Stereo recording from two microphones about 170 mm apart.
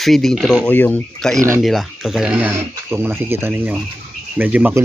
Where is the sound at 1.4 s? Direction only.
15° right (ahead or behind).